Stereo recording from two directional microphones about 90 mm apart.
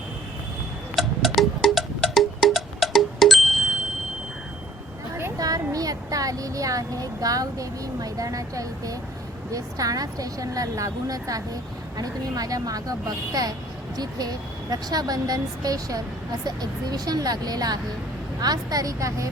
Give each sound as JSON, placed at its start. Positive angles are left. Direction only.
{"t": 0.9, "sound": "music", "side_deg": 0}
{"t": 5.4, "sound": "a woman's voice", "side_deg": -40}